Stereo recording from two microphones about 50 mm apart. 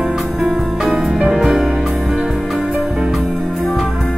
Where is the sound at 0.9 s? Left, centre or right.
Centre.